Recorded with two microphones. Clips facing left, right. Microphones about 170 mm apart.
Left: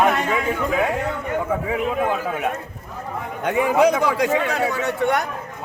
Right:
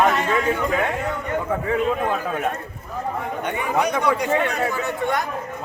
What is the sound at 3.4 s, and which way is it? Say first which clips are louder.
Speech: left 7 dB; 90° left.